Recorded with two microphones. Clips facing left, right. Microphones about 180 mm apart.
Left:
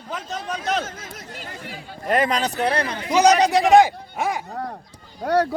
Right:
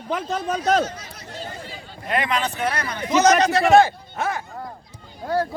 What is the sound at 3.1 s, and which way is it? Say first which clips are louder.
A man's voice: left 1 dB; 15° left (ahead or behind).